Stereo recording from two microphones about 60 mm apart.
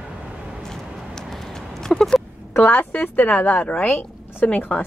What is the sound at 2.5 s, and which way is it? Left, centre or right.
A woman's voice, left.